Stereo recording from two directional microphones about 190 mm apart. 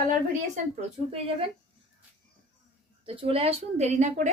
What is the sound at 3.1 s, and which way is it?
A woman's voice, 30° right (ahead or behind).